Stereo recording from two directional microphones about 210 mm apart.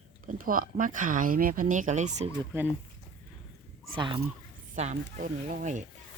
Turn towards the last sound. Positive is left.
turn(degrees=-35)  # may be behind; listen again after turning